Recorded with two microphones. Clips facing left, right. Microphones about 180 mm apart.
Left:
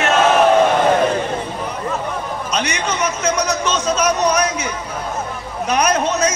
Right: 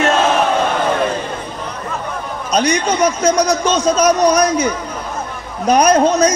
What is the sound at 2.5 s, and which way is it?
Speech, 35° right (ahead or behind).